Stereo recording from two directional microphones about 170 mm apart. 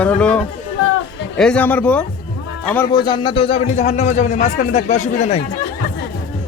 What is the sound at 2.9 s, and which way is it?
Speech, 25° left (ahead or behind).